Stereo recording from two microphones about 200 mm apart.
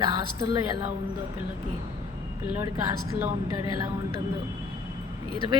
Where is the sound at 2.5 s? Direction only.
15° right (ahead or behind).